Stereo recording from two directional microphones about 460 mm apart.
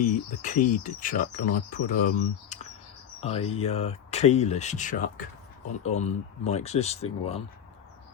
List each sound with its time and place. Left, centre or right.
0.0 s speech: centre